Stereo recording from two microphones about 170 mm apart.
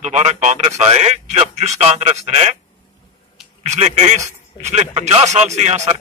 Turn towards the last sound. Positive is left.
turn(degrees=-40)  # may be behind; listen again after turning